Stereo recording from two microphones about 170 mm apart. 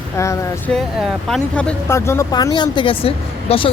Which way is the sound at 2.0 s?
15° left (ahead or behind).